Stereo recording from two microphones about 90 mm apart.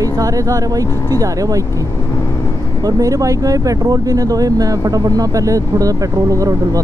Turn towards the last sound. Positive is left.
turn(degrees=-40)  # may be behind; listen again after turning